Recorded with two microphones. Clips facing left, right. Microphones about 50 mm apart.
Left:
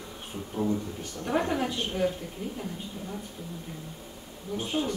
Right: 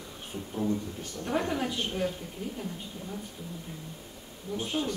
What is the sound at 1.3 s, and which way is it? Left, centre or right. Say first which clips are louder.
Speech: left 2 dB; centre.